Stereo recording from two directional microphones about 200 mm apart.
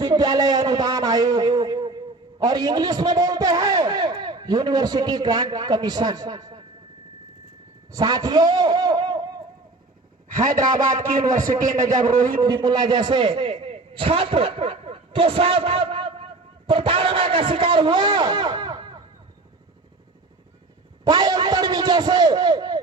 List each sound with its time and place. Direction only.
0.0 s a sound: 20° right (ahead or behind)
2.4 s a man's voice: 20° right (ahead or behind)
7.9 s a man's voice: 20° right (ahead or behind)
10.6 s a man's voice: 20° right (ahead or behind)
10.8 s a man's voice: 40° right (ahead or behind)
12.4 s a man's voice: 20° right (ahead or behind)
21.0 s a man's voice: 20° right (ahead or behind)